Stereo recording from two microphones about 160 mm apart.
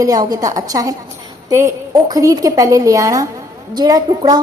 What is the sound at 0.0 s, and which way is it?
A woman's voice, 25° right (ahead or behind).